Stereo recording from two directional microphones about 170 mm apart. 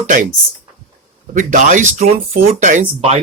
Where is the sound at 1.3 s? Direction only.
50° right (ahead or behind).